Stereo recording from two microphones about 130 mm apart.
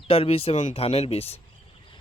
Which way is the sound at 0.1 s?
45° left (ahead or behind).